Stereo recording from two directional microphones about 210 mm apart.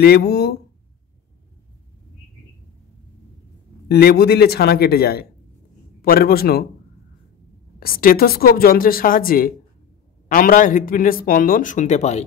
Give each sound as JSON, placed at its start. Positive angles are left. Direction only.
{"t": 0.0, "sound": "a woman's voice", "side_deg": 50}
{"t": 3.9, "sound": "a woman's voice", "side_deg": 50}
{"t": 7.8, "sound": "a woman's voice", "side_deg": 45}